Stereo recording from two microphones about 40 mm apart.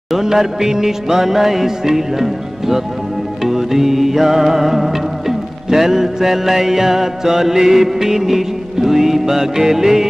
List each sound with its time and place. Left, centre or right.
0.1 s music: centre